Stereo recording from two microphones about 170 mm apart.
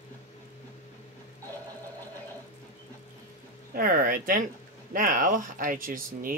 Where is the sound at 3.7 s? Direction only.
55° right (ahead or behind).